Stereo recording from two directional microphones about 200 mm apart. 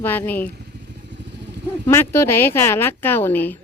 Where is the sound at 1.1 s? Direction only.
60° right (ahead or behind).